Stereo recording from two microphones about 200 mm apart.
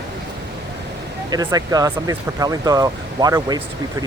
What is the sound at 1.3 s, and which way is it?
Speech, 20° right (ahead or behind).